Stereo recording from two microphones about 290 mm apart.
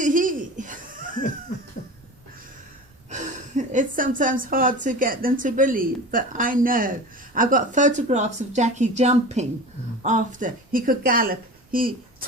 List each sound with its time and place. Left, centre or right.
0.0 s laughter: right
3.1 s speech: right